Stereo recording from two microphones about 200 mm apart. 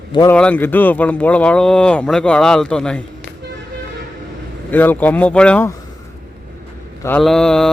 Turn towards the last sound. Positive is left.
turn(degrees=5)  # may be behind; listen again after turning